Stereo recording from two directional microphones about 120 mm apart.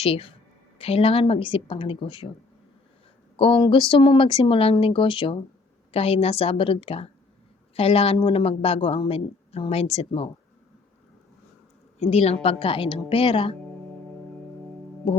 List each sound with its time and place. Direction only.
0.0 s a woman's voice: 50° left (ahead or behind)
3.3 s a woman's voice: 45° left (ahead or behind)
11.9 s a woman's voice: 60° left (ahead or behind)